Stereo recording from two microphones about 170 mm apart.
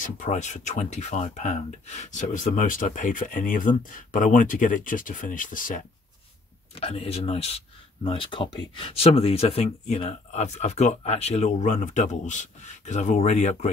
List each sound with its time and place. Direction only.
0.0 s speech: 45° left (ahead or behind)
6.7 s speech: 35° left (ahead or behind)